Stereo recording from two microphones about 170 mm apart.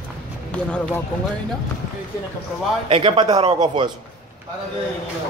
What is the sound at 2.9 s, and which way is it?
Speech, 30° right (ahead or behind).